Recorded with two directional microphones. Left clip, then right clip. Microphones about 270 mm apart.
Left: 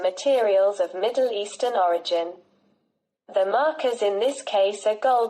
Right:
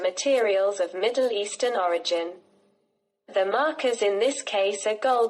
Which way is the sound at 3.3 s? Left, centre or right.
Right.